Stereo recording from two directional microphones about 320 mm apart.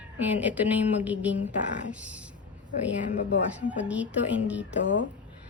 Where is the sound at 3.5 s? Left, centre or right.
Centre.